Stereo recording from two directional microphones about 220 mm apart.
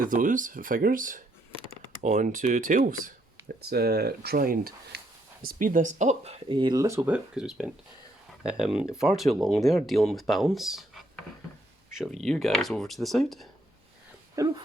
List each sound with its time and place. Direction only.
0.0 s speech: 35° right (ahead or behind); by 13.5 s centre (ahead or behind)
14.3 s speech: 15° right (ahead or behind)